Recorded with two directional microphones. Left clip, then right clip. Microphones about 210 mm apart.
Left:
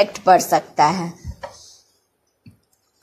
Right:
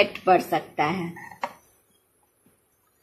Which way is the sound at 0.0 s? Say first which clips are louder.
Left 6 dB; 20° left (ahead or behind).